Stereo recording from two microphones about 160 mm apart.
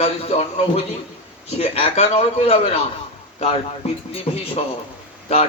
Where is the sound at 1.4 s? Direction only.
40° left (ahead or behind).